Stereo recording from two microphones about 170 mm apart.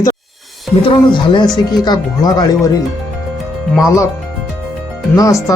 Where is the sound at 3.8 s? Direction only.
20° left (ahead or behind).